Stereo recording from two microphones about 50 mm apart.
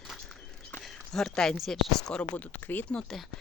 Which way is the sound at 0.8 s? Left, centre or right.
Centre.